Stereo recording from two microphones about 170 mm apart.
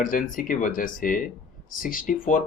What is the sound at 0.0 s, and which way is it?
Speech, 50° left (ahead or behind).